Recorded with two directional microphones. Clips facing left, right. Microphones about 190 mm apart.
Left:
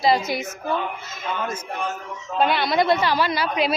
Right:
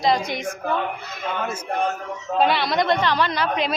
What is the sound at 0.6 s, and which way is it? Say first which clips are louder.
Speech: right 1 dB; 60° right (ahead or behind).